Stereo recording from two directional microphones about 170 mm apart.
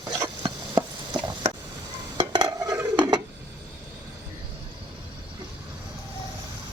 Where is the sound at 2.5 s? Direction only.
20° right (ahead or behind).